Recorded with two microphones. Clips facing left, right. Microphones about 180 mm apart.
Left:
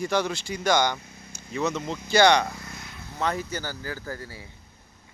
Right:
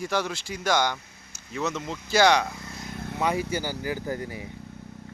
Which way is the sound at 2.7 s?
40° right (ahead or behind).